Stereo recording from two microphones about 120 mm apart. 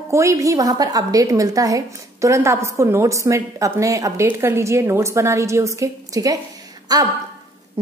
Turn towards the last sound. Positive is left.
turn(degrees=-35)  # may be behind; listen again after turning